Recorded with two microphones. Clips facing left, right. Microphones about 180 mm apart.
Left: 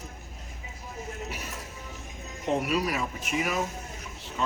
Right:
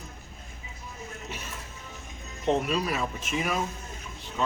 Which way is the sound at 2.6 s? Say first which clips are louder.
Even; 10° left (ahead or behind).